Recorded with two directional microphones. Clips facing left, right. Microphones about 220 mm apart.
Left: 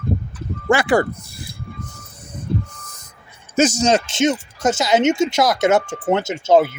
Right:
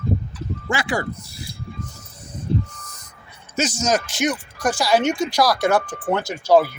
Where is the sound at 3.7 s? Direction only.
30° left (ahead or behind).